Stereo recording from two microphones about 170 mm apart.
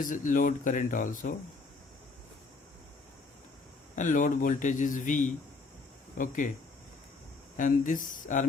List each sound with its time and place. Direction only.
0.0 s a man's voice: 50° left (ahead or behind)
3.9 s a man's voice: 50° left (ahead or behind)
7.5 s a man's voice: 50° left (ahead or behind)